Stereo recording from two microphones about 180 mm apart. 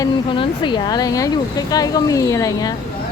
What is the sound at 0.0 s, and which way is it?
Speech, 25° left (ahead or behind).